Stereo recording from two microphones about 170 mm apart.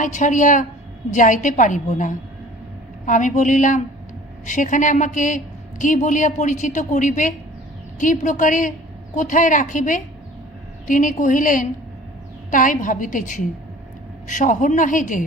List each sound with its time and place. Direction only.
0.0 s a woman's voice: 45° left (ahead or behind)